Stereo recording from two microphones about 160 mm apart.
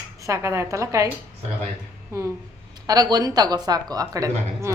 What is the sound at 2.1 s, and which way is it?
A woman's voice, 20° right (ahead or behind).